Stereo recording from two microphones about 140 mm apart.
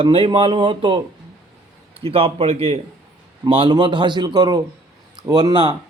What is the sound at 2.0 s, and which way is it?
A man's voice, 45° right (ahead or behind).